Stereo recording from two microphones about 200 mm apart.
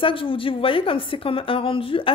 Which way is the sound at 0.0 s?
25° left (ahead or behind).